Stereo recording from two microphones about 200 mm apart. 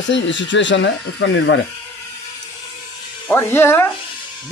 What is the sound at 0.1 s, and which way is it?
Speech, 65° left (ahead or behind).